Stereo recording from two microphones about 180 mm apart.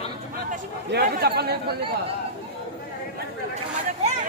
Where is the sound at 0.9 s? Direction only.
65° right (ahead or behind).